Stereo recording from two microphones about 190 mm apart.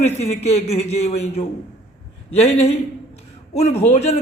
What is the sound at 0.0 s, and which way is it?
A man's voice, 35° left (ahead or behind).